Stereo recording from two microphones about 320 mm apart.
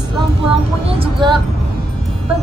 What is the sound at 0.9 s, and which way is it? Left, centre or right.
Child singing, centre.